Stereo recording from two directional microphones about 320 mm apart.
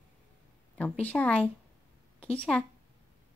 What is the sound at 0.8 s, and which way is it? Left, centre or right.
A woman's voice, centre.